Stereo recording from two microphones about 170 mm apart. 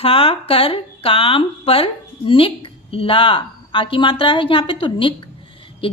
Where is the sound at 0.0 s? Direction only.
35° left (ahead or behind).